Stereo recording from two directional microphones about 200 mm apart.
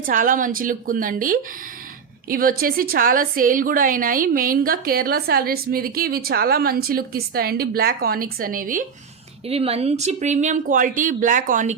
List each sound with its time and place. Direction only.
0.0 s a woman's voice: 40° right (ahead or behind)
9.5 s speech: 30° right (ahead or behind)